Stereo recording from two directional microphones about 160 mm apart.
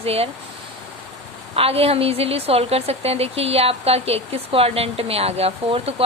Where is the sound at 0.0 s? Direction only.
40° right (ahead or behind).